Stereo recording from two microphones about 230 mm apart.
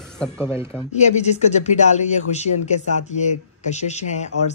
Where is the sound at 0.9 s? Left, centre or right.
Left.